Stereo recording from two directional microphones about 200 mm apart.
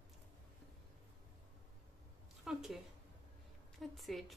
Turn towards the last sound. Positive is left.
turn(degrees=0)  # may be behind; listen again after turning